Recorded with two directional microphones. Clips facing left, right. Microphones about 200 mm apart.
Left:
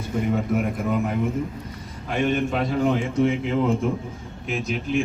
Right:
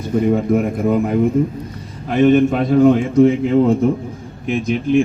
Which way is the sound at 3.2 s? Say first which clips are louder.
Right 8 dB; 35° right (ahead or behind).